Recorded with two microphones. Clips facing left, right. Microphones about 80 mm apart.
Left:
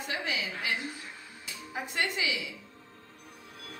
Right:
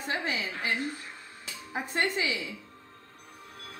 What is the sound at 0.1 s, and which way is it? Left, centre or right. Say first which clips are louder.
Speech: right 3 dB; right.